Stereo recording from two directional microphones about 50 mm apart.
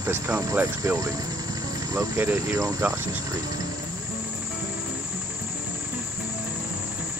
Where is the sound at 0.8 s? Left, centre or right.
Right.